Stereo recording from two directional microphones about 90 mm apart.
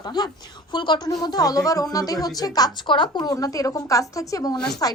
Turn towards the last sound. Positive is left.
turn(degrees=40)  # may be behind; listen again after turning